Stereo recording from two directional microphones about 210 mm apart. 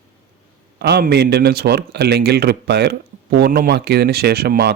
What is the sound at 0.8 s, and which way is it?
A man's voice, 50° right (ahead or behind).